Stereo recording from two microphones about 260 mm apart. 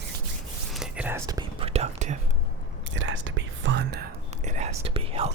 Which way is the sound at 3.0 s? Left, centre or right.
Right.